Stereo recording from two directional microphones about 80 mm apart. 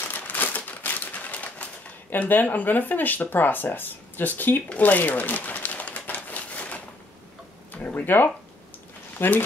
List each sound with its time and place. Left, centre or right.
0.1 s crumpling: left
7.7 s speech: left